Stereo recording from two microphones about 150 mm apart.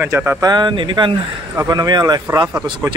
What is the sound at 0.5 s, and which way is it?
Speech, 30° right (ahead or behind).